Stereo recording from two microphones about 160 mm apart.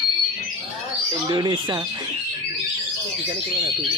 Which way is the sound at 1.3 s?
25° right (ahead or behind).